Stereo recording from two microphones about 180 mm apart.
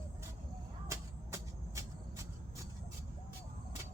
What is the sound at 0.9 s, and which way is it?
Vehicle, 15° right (ahead or behind).